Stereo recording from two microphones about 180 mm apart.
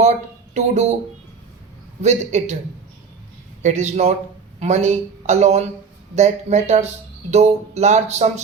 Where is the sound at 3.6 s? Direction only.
40° right (ahead or behind).